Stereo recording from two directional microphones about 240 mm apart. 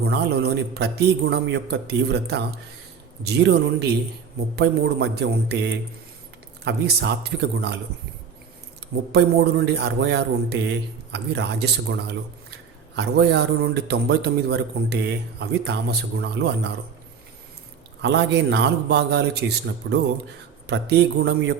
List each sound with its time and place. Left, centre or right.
0.0 s a man's voice: right
6.7 s a man's voice: right
9.1 s a man's voice: right
18.0 s a man's voice: right